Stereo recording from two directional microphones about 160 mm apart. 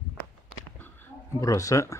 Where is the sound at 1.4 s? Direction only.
20° left (ahead or behind).